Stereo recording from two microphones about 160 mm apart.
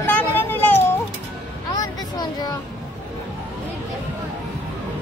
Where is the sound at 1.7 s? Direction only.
25° left (ahead or behind).